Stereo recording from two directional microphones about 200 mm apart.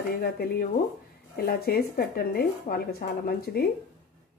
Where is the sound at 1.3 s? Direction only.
50° left (ahead or behind).